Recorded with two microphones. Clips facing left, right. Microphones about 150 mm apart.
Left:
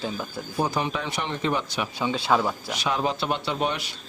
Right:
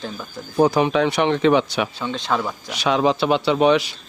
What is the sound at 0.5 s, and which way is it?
Speech, 75° right (ahead or behind).